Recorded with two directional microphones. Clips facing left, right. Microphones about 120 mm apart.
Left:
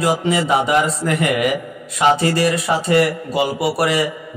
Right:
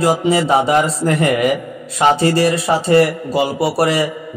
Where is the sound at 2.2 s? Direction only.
30° right (ahead or behind).